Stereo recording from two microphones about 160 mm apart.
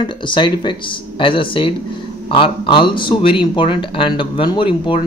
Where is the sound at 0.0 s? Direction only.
30° left (ahead or behind).